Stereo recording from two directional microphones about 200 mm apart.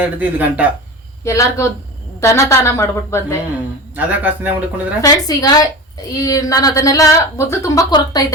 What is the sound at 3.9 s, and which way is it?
Speech, 10° right (ahead or behind).